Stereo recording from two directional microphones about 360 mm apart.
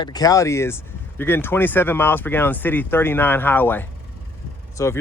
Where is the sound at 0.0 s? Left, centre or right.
Centre.